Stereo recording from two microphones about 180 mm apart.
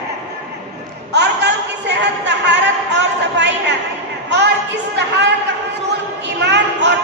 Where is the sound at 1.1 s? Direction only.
70° right (ahead or behind).